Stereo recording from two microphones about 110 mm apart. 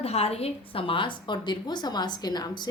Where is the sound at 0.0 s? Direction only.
65° left (ahead or behind).